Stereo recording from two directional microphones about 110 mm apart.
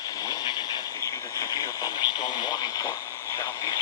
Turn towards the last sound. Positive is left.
turn(degrees=25)  # may be behind; listen again after turning